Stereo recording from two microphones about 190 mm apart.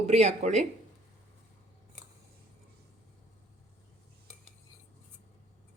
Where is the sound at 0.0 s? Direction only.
35° right (ahead or behind).